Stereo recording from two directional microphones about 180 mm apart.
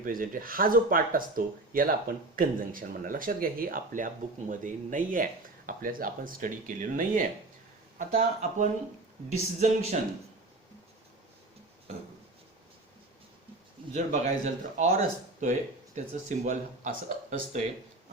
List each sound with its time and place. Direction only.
0.0 s speech: 50° right (ahead or behind)
13.9 s speech: 40° right (ahead or behind)